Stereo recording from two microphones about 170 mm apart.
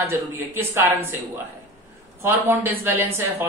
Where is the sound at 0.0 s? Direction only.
15° right (ahead or behind).